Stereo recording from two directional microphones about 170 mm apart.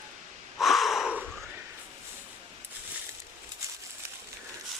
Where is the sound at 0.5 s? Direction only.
Centre (ahead or behind).